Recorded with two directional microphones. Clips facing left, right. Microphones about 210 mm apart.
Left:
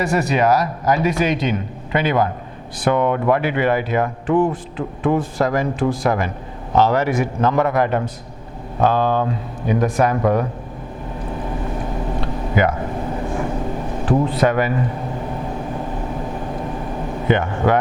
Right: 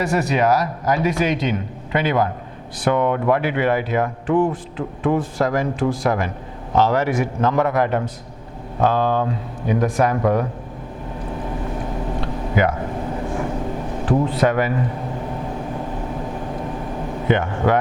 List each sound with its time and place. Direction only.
0.0 s speech: 10° left (ahead or behind)
12.2 s a sound: 15° left (ahead or behind)
13.9 s speech: 25° left (ahead or behind)
17.2 s speech: 15° left (ahead or behind)